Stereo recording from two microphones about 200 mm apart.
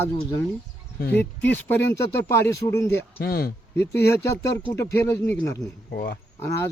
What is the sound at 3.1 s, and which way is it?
Speech, 50° left (ahead or behind).